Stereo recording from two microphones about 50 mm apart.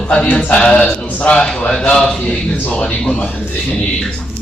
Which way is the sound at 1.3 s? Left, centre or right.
Centre.